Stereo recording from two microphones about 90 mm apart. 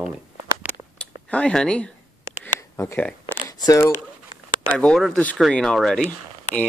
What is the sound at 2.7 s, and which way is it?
Speech, 30° left (ahead or behind).